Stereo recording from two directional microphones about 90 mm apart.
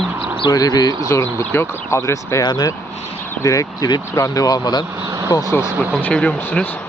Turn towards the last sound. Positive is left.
turn(degrees=10)  # may be behind; listen again after turning